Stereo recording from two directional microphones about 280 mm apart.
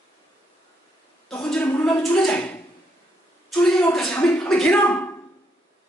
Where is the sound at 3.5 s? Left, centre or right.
Centre.